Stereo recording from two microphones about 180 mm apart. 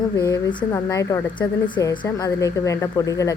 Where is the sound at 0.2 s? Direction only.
20° left (ahead or behind).